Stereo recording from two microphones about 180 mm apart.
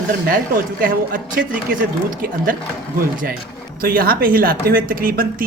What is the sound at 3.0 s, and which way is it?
Speech, 50° right (ahead or behind).